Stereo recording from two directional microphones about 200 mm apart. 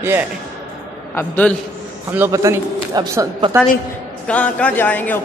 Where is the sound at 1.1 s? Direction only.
5° left (ahead or behind).